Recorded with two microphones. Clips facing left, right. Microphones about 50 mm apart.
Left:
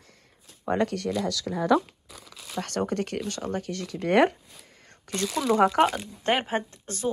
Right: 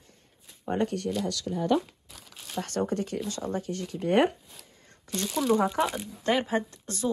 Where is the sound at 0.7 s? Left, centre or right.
Left.